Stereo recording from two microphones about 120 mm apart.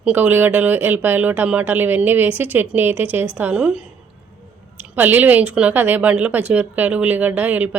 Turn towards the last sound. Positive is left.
turn(degrees=-15)  # may be behind; listen again after turning